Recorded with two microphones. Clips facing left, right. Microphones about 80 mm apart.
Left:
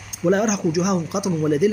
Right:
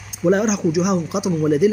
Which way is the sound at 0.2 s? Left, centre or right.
Centre.